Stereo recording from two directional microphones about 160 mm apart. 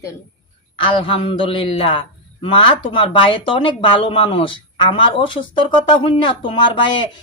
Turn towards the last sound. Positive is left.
turn(degrees=30)  # may be behind; listen again after turning